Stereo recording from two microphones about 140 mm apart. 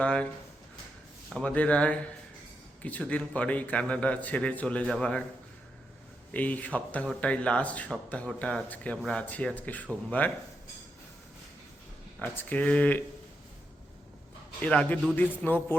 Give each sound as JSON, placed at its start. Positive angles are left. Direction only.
{"t": 0.0, "sound": "a man's voice", "side_deg": 10}
{"t": 1.3, "sound": "a man's voice", "side_deg": 5}
{"t": 6.3, "sound": "a man's voice", "side_deg": 10}
{"t": 12.2, "sound": "a man's voice", "side_deg": 10}
{"t": 14.6, "sound": "a man's voice", "side_deg": 10}